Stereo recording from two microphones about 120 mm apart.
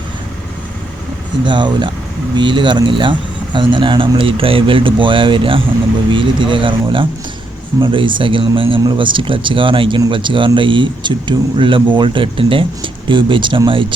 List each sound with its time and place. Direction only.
1.5 s speech: 40° right (ahead or behind)